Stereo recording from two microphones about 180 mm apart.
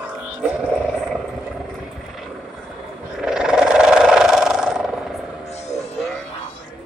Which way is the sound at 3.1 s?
5° right (ahead or behind).